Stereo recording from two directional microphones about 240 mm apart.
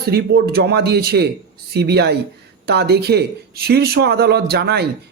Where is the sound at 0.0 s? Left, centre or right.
Right.